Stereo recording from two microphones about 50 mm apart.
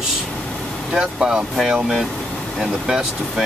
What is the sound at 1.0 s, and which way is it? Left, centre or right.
Speech, centre.